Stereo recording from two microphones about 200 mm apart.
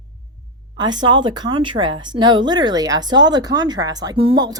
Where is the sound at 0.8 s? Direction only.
20° right (ahead or behind).